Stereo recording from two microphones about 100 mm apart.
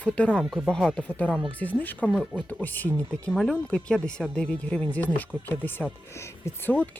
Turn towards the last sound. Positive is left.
turn(degrees=25)  # may be behind; listen again after turning